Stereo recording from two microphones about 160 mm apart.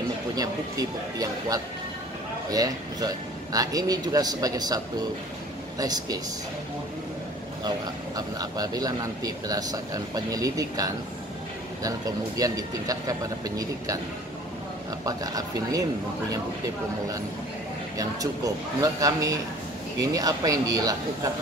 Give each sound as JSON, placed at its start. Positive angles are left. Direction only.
{"t": 0.4, "sound": "speech", "side_deg": -25}
{"t": 8.2, "sound": "speech", "side_deg": -25}
{"t": 12.4, "sound": "speech", "side_deg": -20}
{"t": 15.0, "sound": "speech", "side_deg": -20}
{"t": 17.9, "sound": "speech", "side_deg": -20}